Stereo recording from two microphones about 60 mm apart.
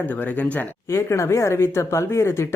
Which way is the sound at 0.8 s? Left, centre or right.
Left.